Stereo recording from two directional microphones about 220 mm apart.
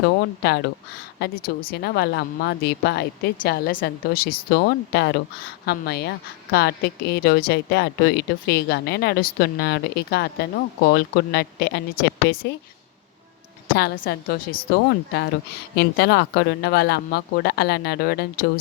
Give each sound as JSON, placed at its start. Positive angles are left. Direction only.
{"t": 0.0, "sound": "speech", "side_deg": 50}
{"t": 13.7, "sound": "speech", "side_deg": 45}
{"t": 15.7, "sound": "speech", "side_deg": 50}